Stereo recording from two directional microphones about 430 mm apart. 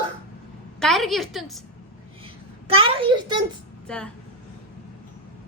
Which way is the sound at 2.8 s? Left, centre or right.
Centre.